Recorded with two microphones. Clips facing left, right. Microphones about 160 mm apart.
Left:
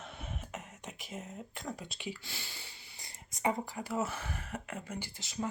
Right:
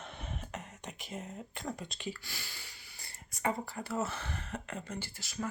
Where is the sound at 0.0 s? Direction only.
5° left (ahead or behind).